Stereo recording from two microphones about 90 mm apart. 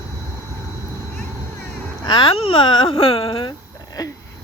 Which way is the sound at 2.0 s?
60° left (ahead or behind).